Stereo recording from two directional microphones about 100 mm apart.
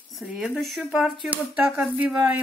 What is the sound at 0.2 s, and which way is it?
Speech, 5° right (ahead or behind).